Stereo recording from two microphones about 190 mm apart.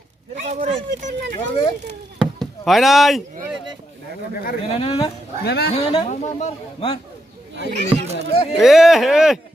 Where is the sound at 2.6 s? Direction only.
Centre (ahead or behind).